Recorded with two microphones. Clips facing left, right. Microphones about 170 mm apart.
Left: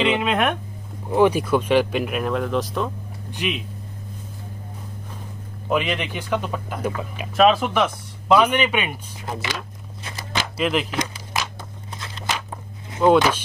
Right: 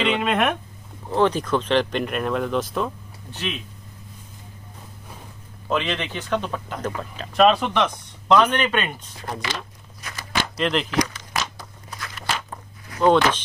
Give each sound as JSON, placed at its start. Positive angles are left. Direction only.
{"t": 0.0, "sound": "speech", "side_deg": 0}
{"t": 1.1, "sound": "speech", "side_deg": 10}
{"t": 3.3, "sound": "speech", "side_deg": 15}
{"t": 5.7, "sound": "speech", "side_deg": 10}
{"t": 11.9, "sound": "a sound", "side_deg": 25}
{"t": 12.3, "sound": "a sound", "side_deg": 5}
{"t": 13.0, "sound": "speech", "side_deg": 10}